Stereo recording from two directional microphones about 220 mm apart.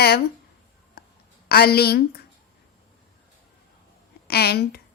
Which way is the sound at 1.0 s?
45° left (ahead or behind).